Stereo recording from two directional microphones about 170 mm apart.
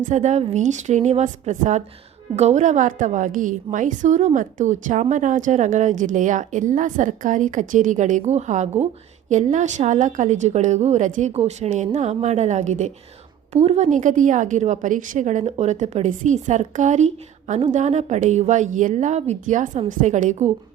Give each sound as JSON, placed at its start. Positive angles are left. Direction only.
{"t": 0.1, "sound": "a woman's voice", "side_deg": -45}